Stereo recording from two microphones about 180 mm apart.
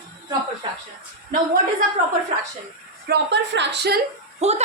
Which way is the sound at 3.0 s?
70° right (ahead or behind).